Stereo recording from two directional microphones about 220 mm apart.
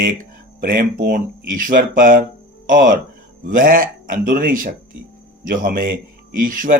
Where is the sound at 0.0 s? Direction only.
40° right (ahead or behind).